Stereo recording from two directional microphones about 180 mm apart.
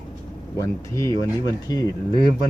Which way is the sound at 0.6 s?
15° left (ahead or behind).